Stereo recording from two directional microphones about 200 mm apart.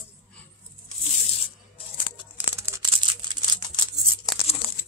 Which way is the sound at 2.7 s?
20° right (ahead or behind).